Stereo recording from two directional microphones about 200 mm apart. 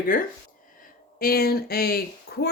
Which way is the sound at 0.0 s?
45° left (ahead or behind).